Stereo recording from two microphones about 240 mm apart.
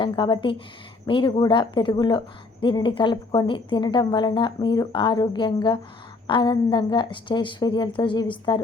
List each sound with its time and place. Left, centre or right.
0.0 s a woman's voice: centre